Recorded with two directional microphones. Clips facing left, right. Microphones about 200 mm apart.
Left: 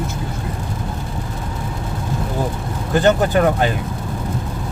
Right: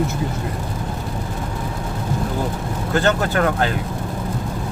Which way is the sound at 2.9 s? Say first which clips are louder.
Left 4 dB; 15° left (ahead or behind).